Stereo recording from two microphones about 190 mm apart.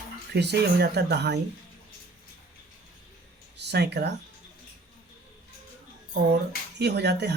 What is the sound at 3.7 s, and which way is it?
Speech, 60° right (ahead or behind).